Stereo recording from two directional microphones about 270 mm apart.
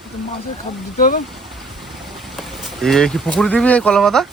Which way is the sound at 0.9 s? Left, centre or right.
Left.